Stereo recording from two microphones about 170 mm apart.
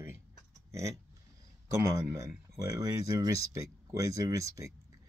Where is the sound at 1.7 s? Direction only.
20° right (ahead or behind).